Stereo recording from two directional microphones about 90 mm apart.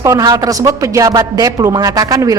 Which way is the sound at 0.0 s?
35° right (ahead or behind).